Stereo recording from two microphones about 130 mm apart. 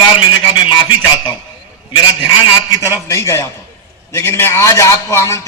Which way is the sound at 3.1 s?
20° left (ahead or behind).